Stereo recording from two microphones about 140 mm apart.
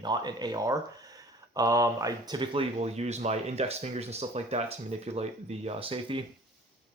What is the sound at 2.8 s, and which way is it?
Speech, 50° right (ahead or behind).